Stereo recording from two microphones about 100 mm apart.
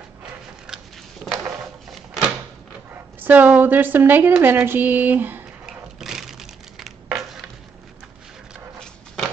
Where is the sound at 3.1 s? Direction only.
15° right (ahead or behind).